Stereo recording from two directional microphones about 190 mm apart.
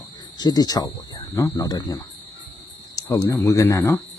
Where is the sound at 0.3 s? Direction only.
20° left (ahead or behind).